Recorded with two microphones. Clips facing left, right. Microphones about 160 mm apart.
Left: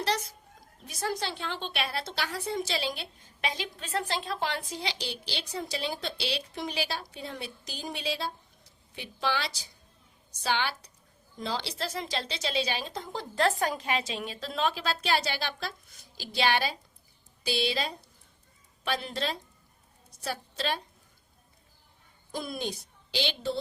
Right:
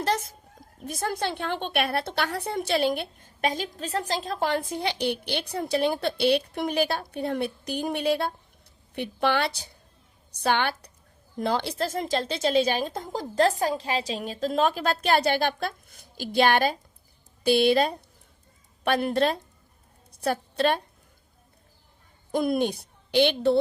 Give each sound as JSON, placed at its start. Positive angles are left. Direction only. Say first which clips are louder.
{"t": 0.0, "sound": "a woman's voice", "louder": "right 4 dB", "side_deg": -50}
{"t": 20.1, "sound": "a sound", "louder": "right 9 dB", "side_deg": -55}
{"t": 22.3, "sound": "a woman's voice", "louder": "right 10 dB", "side_deg": -55}